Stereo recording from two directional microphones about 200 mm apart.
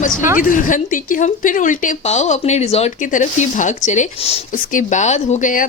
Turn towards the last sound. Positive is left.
turn(degrees=40)  # may be behind; listen again after turning